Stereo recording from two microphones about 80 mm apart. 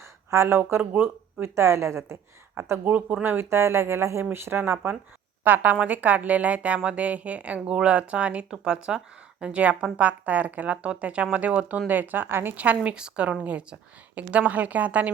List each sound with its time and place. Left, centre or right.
0.0 s speech: right
2.9 s a woman's voice: centre
3.2 s a woman's voice: right